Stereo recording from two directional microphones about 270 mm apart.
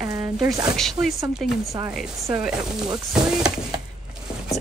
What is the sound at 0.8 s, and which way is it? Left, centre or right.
Speech, centre.